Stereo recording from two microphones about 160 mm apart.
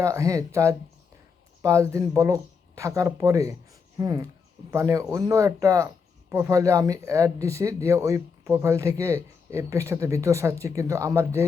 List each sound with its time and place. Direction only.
0.0 s speech: 20° right (ahead or behind)